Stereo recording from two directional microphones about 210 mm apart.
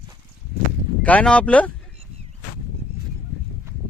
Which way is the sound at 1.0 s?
5° left (ahead or behind).